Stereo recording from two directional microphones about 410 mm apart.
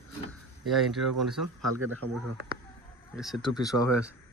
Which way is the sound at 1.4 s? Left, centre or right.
Right.